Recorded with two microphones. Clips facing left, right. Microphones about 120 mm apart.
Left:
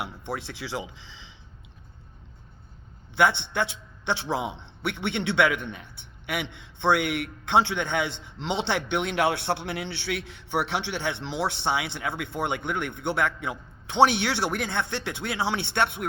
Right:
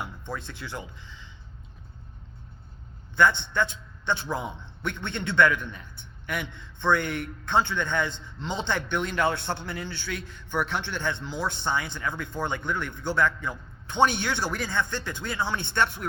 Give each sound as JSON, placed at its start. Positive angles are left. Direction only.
{"t": 0.0, "sound": "speech", "side_deg": 75}
{"t": 3.2, "sound": "a man's voice", "side_deg": 65}